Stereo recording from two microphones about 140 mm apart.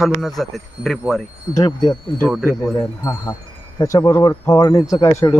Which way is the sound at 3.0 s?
25° left (ahead or behind).